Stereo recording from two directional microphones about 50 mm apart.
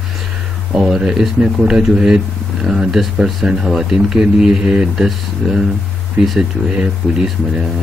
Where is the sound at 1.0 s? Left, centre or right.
Centre.